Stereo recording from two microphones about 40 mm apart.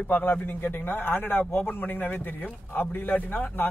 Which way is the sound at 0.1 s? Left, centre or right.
Left.